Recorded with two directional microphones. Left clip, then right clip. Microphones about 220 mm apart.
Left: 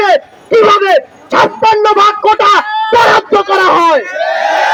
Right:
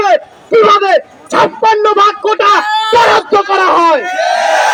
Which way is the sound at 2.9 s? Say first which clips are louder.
Left 1 dB; 40° left (ahead or behind).